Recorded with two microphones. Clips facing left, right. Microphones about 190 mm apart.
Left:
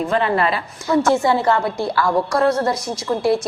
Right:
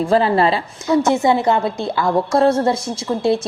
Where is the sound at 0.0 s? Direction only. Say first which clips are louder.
Right 4 dB; 30° right (ahead or behind).